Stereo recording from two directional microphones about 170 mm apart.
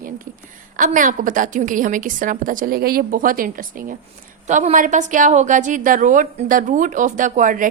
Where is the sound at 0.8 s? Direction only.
50° right (ahead or behind).